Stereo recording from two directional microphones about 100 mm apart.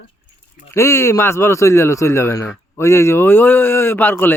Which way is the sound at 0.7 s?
30° left (ahead or behind).